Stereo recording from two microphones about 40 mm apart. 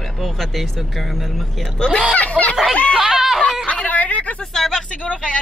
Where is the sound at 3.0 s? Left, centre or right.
Centre.